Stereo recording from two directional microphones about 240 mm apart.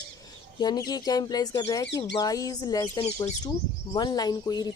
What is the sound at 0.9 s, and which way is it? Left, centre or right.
Speech, centre.